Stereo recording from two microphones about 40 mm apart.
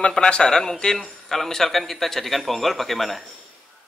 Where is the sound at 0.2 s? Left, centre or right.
Left.